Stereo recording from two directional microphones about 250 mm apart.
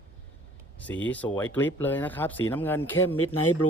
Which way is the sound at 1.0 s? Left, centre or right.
Centre.